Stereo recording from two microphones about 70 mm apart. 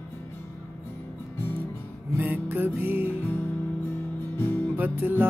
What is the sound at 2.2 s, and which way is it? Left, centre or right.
Music, right.